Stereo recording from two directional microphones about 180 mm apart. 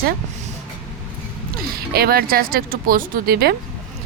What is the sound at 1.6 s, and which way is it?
Speech, 55° right (ahead or behind).